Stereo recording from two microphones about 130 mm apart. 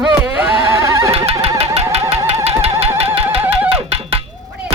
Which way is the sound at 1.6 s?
50° right (ahead or behind).